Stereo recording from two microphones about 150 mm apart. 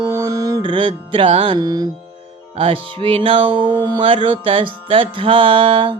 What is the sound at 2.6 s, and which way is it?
Music, 35° right (ahead or behind).